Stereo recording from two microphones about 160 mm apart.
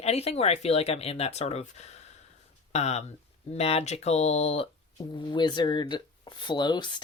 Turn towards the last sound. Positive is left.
turn(degrees=25)  # may be behind; listen again after turning